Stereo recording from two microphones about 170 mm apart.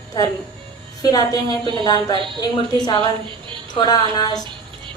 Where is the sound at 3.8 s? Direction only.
25° left (ahead or behind).